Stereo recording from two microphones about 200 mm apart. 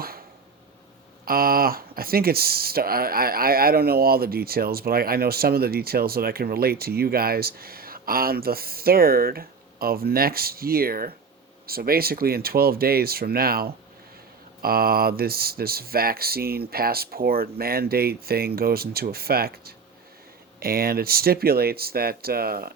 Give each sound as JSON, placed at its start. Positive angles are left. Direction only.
{"t": 1.2, "sound": "speech", "side_deg": -45}